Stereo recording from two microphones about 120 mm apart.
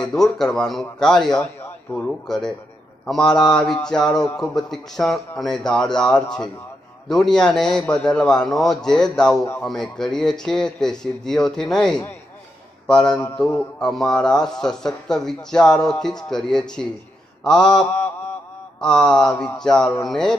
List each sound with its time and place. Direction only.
0.1 s speech: 5° left (ahead or behind)
1.6 s a sound: 15° left (ahead or behind)
2.0 s a man's voice: 5° left (ahead or behind)